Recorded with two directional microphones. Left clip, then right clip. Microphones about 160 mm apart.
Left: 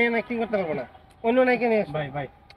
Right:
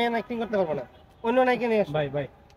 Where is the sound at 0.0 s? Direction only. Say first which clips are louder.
Left 3 dB; 20° right (ahead or behind).